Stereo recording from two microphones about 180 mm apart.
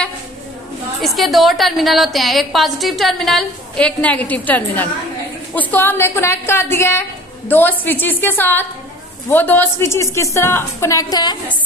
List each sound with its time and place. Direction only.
1.0 s a woman's voice: centre (ahead or behind); by 11.3 s 20° left (ahead or behind)